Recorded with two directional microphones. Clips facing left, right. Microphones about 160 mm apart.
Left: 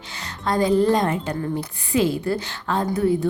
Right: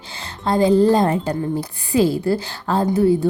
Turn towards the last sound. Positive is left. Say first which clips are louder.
# right 4 dB
turn(degrees=-30)  # may be behind; listen again after turning